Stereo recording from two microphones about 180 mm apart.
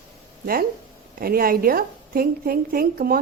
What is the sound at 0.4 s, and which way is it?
A woman's voice, 55° right (ahead or behind).